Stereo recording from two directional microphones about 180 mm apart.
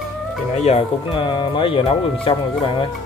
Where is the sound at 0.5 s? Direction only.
35° left (ahead or behind).